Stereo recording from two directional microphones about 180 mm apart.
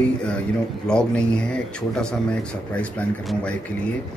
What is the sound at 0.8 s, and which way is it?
Speech, 5° left (ahead or behind).